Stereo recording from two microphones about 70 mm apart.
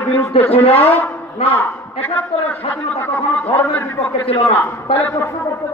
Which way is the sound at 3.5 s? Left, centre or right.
Left.